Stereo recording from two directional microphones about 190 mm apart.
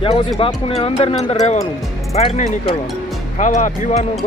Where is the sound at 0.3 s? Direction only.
30° left (ahead or behind).